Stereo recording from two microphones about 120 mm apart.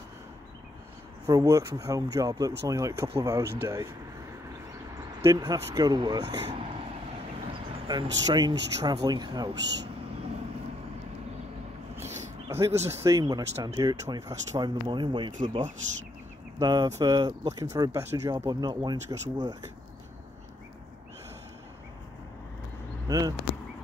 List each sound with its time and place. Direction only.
1.2 s speech: 30° right (ahead or behind)
5.2 s speech: 30° right (ahead or behind)
7.9 s speech: 35° right (ahead or behind)
12.4 s speech: 20° right (ahead or behind)
13.7 s speech: 35° right (ahead or behind)
23.0 s a sound: 30° right (ahead or behind)